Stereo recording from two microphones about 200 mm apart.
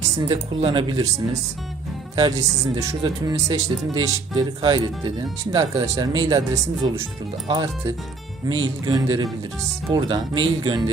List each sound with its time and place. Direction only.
0.2 s speech: 25° right (ahead or behind)
8.5 s speech: 80° right
8.9 s speech: 20° right (ahead or behind)